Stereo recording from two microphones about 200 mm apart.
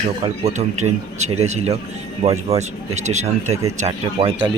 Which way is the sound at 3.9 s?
25° right (ahead or behind).